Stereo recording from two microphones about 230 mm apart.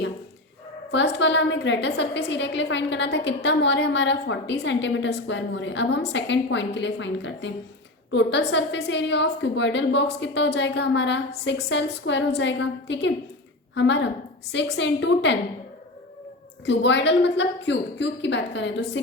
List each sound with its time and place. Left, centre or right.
0.9 s a woman's voice: left
16.6 s a woman's voice: left